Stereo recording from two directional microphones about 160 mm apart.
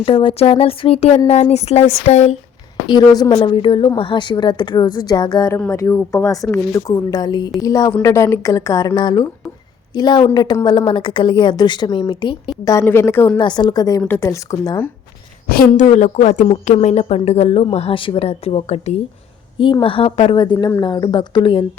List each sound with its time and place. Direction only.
0.0 s a woman's voice: 35° left (ahead or behind)
2.8 s a woman's voice: 25° left (ahead or behind)
12.6 s speech: 15° left (ahead or behind)
13.4 s a woman's voice: 25° left (ahead or behind)
15.7 s a woman's voice: 45° left (ahead or behind); by 21.6 s 30° left (ahead or behind)